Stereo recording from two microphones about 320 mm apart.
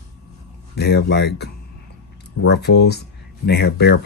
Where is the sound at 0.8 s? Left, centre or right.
Left.